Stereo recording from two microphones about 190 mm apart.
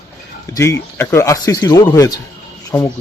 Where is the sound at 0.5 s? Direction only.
15° left (ahead or behind).